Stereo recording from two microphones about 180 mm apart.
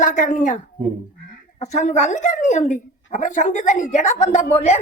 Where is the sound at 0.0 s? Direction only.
45° left (ahead or behind).